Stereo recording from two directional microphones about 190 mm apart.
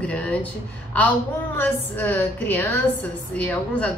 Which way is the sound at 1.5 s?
10° left (ahead or behind).